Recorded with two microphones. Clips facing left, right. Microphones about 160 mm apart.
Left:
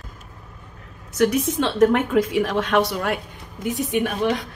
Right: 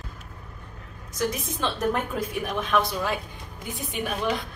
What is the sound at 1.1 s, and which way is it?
A woman's voice, 70° left (ahead or behind).